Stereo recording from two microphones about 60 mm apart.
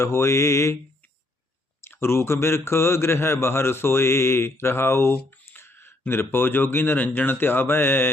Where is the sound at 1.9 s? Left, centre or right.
Left.